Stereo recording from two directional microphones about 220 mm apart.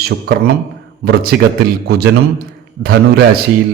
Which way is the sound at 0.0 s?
45° right (ahead or behind).